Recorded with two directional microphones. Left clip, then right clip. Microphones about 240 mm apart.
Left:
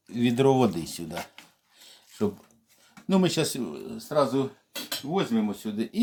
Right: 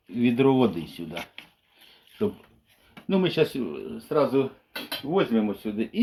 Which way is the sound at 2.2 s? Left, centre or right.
Left.